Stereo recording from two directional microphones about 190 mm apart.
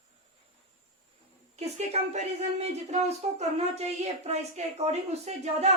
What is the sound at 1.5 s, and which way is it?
Speech, 35° right (ahead or behind).